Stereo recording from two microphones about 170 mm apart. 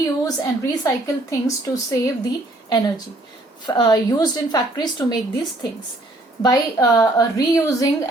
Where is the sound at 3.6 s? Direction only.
25° left (ahead or behind).